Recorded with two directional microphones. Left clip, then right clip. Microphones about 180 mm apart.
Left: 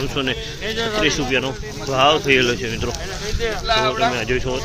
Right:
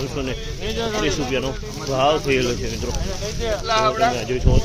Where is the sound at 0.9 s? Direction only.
10° right (ahead or behind).